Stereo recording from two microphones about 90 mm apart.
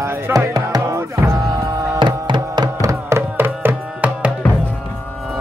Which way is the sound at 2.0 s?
60° right (ahead or behind).